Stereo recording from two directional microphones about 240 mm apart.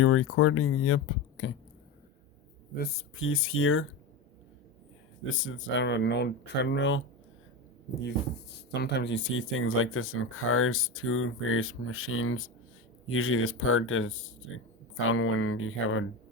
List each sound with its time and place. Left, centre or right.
0.0 s speech: left
3.2 s speech: left
5.3 s speech: left
8.0 s speech: left